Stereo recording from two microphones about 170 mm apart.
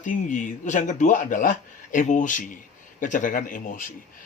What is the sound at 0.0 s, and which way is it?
Speech, 50° left (ahead or behind).